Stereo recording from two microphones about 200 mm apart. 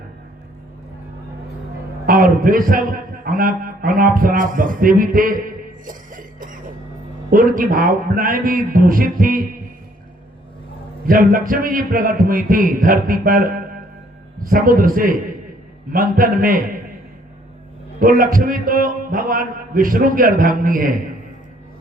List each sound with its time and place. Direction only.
2.0 s a man's voice: 45° right (ahead or behind)
11.0 s a man's voice: 45° right (ahead or behind)
18.0 s a man's voice: 45° right (ahead or behind)